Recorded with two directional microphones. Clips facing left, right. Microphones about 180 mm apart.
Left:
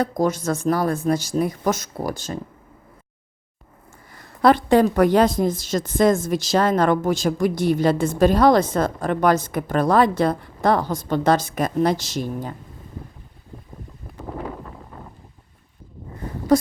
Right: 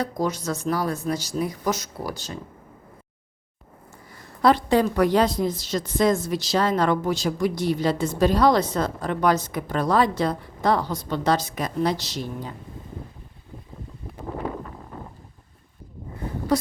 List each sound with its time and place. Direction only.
0.0 s a woman's voice: 50° left (ahead or behind)
4.4 s a woman's voice: 55° left (ahead or behind)
16.5 s a sound: 45° left (ahead or behind)